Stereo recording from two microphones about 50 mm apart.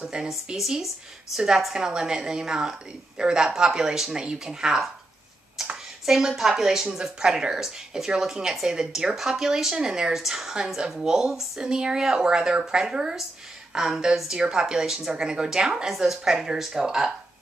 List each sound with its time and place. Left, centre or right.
0.0 s a woman's voice: centre
6.0 s a woman's voice: centre